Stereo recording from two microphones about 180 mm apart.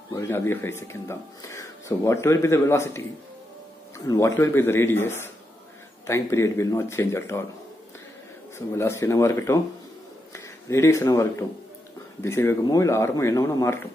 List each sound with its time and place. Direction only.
0.1 s speech: 15° left (ahead or behind)
4.1 s speech: 15° left (ahead or behind)
8.5 s speech: 15° left (ahead or behind)